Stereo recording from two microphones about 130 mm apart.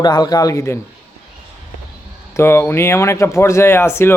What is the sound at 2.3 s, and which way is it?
Speech, 20° left (ahead or behind).